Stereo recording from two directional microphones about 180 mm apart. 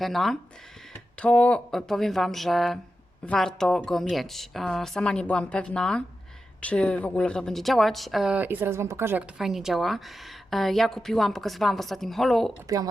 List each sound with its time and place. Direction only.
0.0 s speech: centre (ahead or behind)
9.4 s speech: centre (ahead or behind)
12.6 s speech: 20° right (ahead or behind)